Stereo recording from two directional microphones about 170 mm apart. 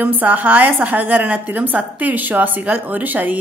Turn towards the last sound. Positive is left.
turn(degrees=-10)  # may be behind; listen again after turning